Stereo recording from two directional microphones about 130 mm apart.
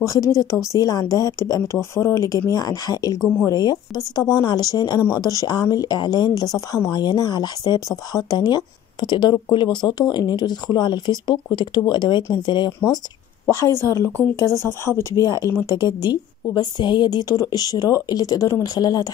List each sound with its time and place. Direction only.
0.0 s speech: 25° left (ahead or behind)
13.5 s speech: 20° left (ahead or behind)